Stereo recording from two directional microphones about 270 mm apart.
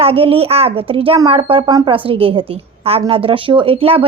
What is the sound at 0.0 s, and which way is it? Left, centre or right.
A woman's voice, right.